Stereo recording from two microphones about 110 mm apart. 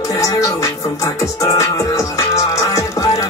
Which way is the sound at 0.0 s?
30° left (ahead or behind).